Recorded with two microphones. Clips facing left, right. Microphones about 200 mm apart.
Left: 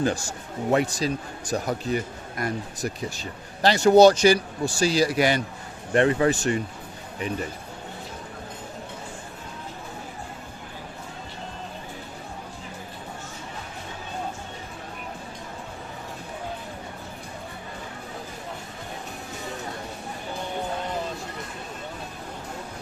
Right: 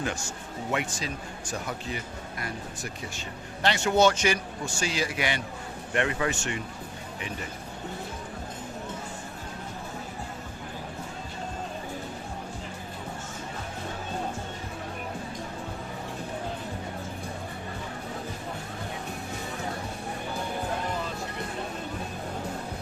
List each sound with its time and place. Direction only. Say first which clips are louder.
0.0 s speech: left 7 dB; 35° left (ahead or behind)